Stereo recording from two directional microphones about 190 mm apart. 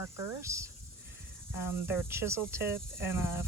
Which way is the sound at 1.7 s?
15° right (ahead or behind).